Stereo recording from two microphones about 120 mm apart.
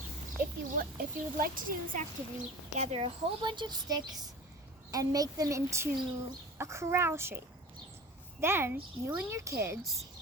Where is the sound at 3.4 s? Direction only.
40° right (ahead or behind).